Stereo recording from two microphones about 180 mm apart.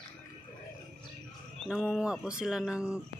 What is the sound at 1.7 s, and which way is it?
Speech, centre (ahead or behind).